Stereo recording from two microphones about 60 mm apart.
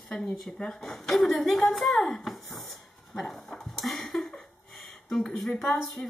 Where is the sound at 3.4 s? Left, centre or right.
Centre.